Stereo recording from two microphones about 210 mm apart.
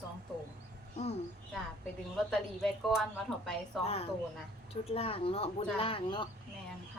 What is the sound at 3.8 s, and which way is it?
Speech, 30° left (ahead or behind).